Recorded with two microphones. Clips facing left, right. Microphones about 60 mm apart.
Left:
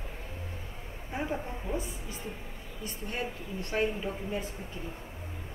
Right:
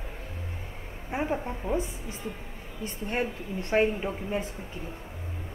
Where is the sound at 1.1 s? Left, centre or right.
Right.